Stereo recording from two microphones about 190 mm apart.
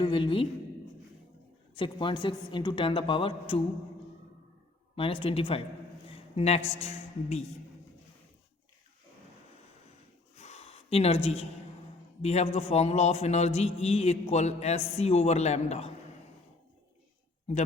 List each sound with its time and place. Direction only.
0.0 s speech: 25° left (ahead or behind)
1.7 s speech: 25° left (ahead or behind)
5.2 s a man's voice: 30° left (ahead or behind)
10.3 s a sound: 35° left (ahead or behind)
12.2 s a man's voice: 35° left (ahead or behind)